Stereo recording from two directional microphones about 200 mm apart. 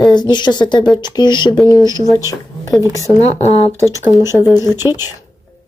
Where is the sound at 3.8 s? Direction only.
15° right (ahead or behind).